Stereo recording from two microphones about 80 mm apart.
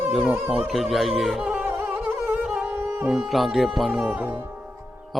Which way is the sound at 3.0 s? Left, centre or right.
Centre.